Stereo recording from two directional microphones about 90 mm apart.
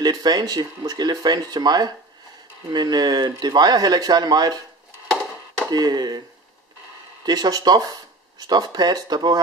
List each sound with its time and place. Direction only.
0.0 s speech: 50° right (ahead or behind)
5.7 s speech: 50° right (ahead or behind)
7.2 s speech: 45° right (ahead or behind)